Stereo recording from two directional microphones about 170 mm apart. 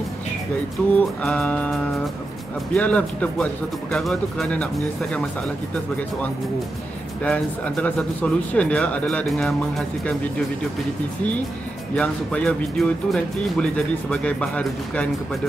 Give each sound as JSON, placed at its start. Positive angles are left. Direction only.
{"t": 0.9, "sound": "speech", "side_deg": 5}
{"t": 7.2, "sound": "speech", "side_deg": 5}
{"t": 11.9, "sound": "speech", "side_deg": 5}